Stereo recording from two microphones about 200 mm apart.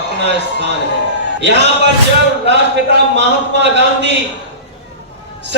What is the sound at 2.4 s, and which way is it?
A man's voice, 60° right (ahead or behind).